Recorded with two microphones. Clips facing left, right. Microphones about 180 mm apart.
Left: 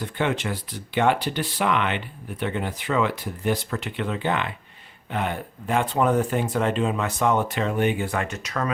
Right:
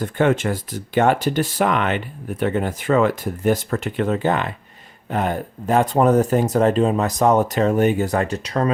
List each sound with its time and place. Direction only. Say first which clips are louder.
0.0 s speech: right 7 dB; 45° right (ahead or behind)